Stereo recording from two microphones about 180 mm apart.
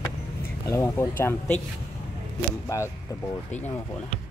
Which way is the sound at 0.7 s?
15° left (ahead or behind).